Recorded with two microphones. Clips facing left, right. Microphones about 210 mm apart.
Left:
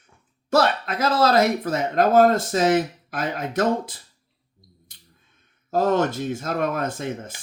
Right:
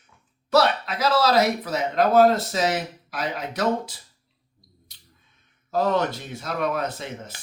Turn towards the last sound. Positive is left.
turn(degrees=50)  # may be behind; listen again after turning